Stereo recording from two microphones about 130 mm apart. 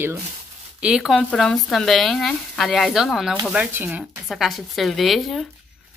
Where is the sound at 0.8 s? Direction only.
5° right (ahead or behind).